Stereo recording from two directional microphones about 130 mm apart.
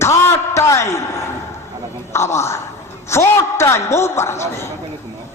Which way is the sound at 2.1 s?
20° left (ahead or behind).